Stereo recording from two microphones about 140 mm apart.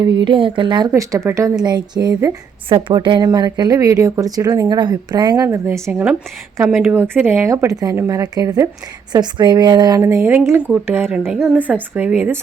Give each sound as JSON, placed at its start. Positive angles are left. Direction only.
{"t": 0.0, "sound": "speech", "side_deg": -35}
{"t": 0.9, "sound": "speech", "side_deg": -25}
{"t": 10.0, "sound": "speech", "side_deg": -20}